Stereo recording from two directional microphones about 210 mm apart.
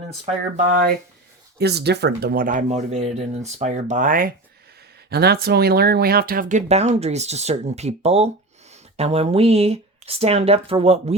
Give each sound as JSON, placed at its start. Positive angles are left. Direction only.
{"t": 0.7, "sound": "speech", "side_deg": -45}